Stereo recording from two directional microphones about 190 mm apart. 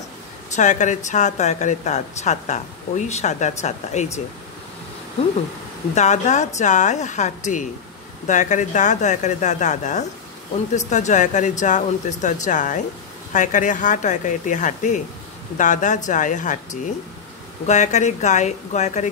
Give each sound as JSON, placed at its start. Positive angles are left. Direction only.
{"t": 0.6, "sound": "a woman's voice", "side_deg": 40}
{"t": 5.9, "sound": "a woman's voice", "side_deg": 40}
{"t": 17.6, "sound": "a woman's voice", "side_deg": 40}